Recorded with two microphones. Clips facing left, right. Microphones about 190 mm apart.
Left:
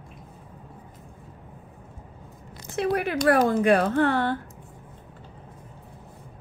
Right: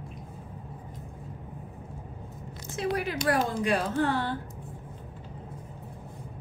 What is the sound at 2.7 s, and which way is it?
Speech, 60° left (ahead or behind).